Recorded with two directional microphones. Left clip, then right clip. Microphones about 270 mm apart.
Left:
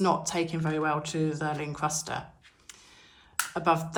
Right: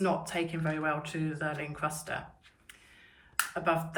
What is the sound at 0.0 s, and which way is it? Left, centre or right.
Speech, centre.